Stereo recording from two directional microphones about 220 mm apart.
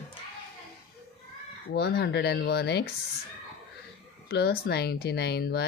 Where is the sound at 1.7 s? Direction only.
45° left (ahead or behind).